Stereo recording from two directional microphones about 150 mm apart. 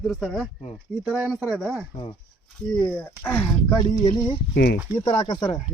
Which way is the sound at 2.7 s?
5° left (ahead or behind).